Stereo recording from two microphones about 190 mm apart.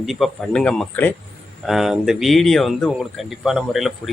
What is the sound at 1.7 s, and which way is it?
Speech, centre (ahead or behind).